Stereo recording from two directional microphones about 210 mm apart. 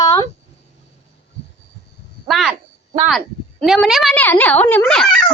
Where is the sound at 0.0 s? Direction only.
15° left (ahead or behind).